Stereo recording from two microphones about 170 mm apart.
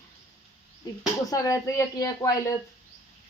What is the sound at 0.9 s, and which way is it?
Speech, 25° left (ahead or behind).